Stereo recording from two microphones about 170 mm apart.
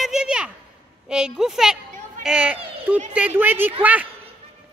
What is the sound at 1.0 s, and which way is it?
A woman's voice, 5° right (ahead or behind).